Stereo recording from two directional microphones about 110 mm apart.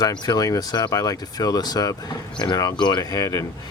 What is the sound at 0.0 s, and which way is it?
Speech, 40° left (ahead or behind).